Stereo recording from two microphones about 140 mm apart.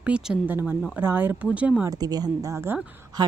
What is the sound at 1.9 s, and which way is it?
Speech, 25° right (ahead or behind).